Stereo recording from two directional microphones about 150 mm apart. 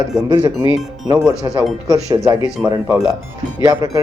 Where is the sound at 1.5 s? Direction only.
25° right (ahead or behind).